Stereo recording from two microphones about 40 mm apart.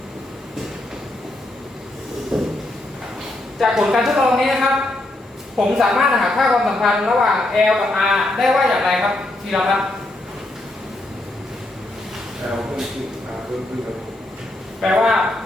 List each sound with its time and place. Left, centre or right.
2.3 s a sound: centre
3.6 s a woman's voice: centre
12.5 s a woman's voice: centre
14.8 s a woman's voice: centre